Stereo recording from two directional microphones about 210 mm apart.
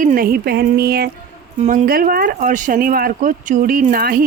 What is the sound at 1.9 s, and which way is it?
Speech, 45° right (ahead or behind).